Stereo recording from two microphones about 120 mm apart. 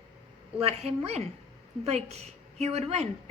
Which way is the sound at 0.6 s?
60° right (ahead or behind).